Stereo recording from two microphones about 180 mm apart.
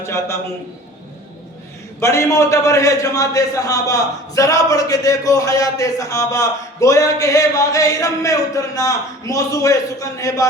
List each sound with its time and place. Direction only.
0.0 s a man's voice: 15° left (ahead or behind)
2.0 s a man's voice: 15° left (ahead or behind)